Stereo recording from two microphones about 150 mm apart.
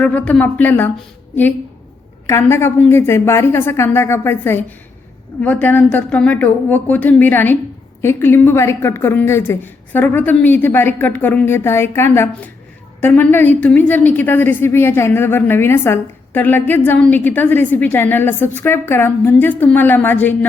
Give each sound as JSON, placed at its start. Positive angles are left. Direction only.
{"t": 0.0, "sound": "a woman's voice", "side_deg": 10}
{"t": 2.2, "sound": "a woman's voice", "side_deg": 15}